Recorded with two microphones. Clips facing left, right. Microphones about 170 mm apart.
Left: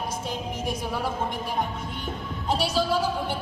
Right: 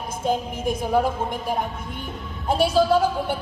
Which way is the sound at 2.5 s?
55° right (ahead or behind).